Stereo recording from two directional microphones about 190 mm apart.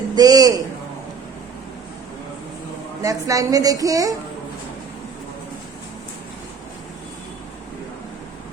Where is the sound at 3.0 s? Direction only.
15° right (ahead or behind).